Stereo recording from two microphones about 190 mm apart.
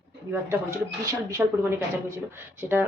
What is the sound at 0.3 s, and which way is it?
Speech, 15° right (ahead or behind).